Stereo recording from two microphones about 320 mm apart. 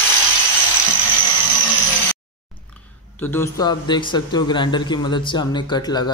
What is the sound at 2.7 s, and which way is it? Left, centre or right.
Speech, centre.